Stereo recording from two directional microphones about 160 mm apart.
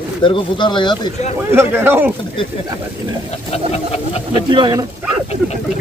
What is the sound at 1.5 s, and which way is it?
Speech, 15° right (ahead or behind).